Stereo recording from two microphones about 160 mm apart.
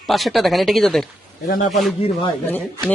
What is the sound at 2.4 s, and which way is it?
Speech, 10° left (ahead or behind).